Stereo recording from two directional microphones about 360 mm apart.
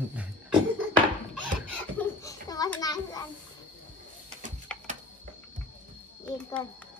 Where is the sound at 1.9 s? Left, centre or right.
Centre.